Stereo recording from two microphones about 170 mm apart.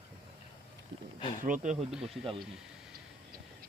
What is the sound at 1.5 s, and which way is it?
Speech, 50° right (ahead or behind).